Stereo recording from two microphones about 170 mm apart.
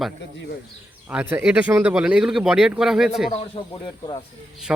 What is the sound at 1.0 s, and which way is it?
Speech, 10° right (ahead or behind).